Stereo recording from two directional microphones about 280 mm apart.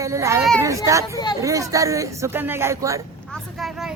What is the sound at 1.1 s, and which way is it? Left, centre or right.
Speech, centre.